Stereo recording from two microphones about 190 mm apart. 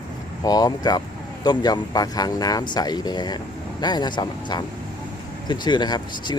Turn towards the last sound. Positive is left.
turn(degrees=20)  # may be behind; listen again after turning